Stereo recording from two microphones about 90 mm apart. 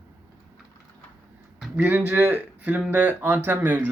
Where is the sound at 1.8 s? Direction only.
15° right (ahead or behind).